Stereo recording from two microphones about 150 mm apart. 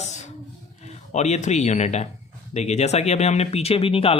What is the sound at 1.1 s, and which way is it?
Speech, 50° left (ahead or behind).